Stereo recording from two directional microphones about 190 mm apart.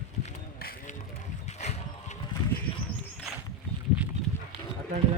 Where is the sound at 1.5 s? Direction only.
35° left (ahead or behind).